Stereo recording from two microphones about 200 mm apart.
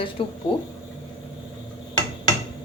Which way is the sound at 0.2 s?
25° left (ahead or behind).